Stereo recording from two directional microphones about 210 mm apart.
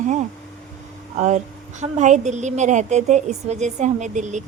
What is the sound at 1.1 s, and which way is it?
A woman's voice, 35° right (ahead or behind).